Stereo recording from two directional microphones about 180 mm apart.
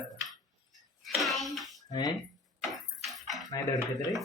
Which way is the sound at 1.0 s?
Centre (ahead or behind).